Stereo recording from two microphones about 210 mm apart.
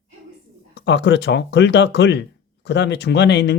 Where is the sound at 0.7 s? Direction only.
60° left (ahead or behind).